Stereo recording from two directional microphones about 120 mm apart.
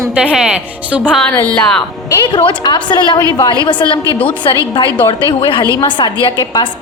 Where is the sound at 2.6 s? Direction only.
40° left (ahead or behind).